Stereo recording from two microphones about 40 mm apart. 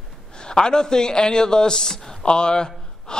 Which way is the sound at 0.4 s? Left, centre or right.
Centre.